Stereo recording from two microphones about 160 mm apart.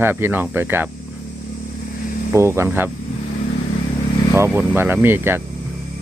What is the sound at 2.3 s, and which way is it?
Speech, 15° right (ahead or behind).